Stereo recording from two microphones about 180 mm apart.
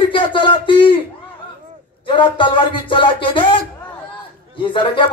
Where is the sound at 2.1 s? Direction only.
25° left (ahead or behind).